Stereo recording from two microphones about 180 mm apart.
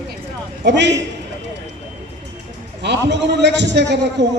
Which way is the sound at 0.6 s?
70° right (ahead or behind).